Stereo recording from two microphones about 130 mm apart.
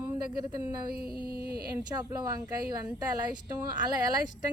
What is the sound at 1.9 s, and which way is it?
Speech, 30° right (ahead or behind).